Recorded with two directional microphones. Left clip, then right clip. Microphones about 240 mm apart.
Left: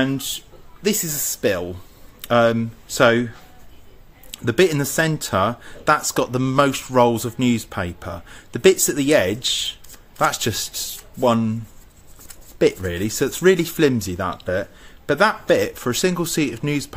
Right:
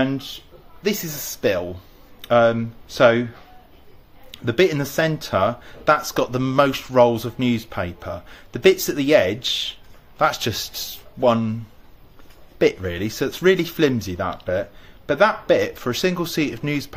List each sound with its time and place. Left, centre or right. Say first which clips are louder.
0.0 s speech: left 1 dB; left
4.3 s speech: left 1 dB; left
12.5 s speech: left 1 dB; left